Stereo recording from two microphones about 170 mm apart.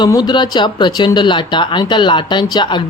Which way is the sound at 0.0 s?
25° left (ahead or behind).